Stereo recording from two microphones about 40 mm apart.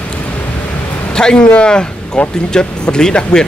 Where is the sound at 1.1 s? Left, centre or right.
Centre.